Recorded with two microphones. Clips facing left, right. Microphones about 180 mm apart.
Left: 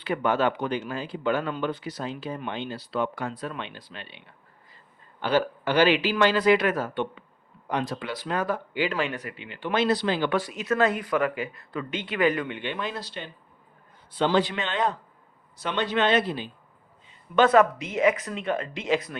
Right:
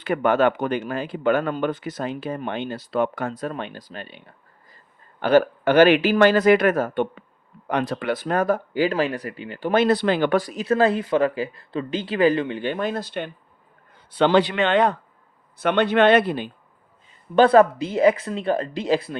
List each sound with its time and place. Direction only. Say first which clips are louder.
0.0 s speech: right 5 dB; 50° right (ahead or behind)
7.7 s speech: right 6 dB; 60° right (ahead or behind)
10.3 s speech: right 5 dB; 35° right (ahead or behind); by 13.3 s 55° right (ahead or behind)
14.1 s speech: right 5 dB; 70° right (ahead or behind)
17.3 s speech: right 4 dB; 35° right (ahead or behind)